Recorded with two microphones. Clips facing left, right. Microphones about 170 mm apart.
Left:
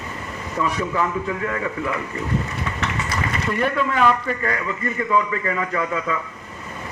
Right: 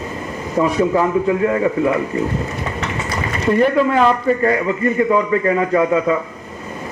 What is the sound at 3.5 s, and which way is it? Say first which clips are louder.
A man's voice: right 9 dB; 35° right (ahead or behind).